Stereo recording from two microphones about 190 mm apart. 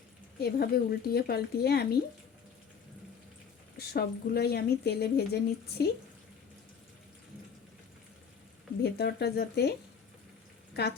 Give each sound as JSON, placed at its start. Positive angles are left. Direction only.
{"t": 0.3, "sound": "a woman's voice", "side_deg": 55}
{"t": 3.8, "sound": "a woman's voice", "side_deg": 55}
{"t": 8.8, "sound": "a woman's voice", "side_deg": 60}
{"t": 10.8, "sound": "a woman's voice", "side_deg": 60}